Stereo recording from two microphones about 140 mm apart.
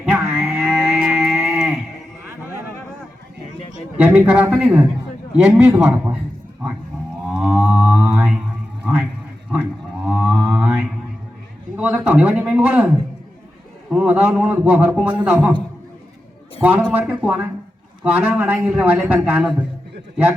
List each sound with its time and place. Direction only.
0.0 s music: 15° right (ahead or behind)
0.3 s music: centre (ahead or behind)
1.0 s a sound: 5° right (ahead or behind)
3.9 s a man's voice: 10° right (ahead or behind)
7.3 s whale vocalization: 5° right (ahead or behind)
8.8 s a sound: 10° right (ahead or behind)
10.1 s mantra: 5° right (ahead or behind)
11.8 s a sound: 10° right (ahead or behind)
13.9 s a man's voice: 10° right (ahead or behind)
16.6 s a man's voice: 15° right (ahead or behind)